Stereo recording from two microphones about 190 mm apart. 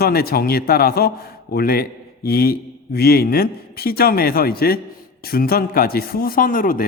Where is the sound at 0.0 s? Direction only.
55° left (ahead or behind).